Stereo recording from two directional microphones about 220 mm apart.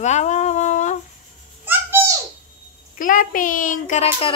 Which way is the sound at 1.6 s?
10° right (ahead or behind).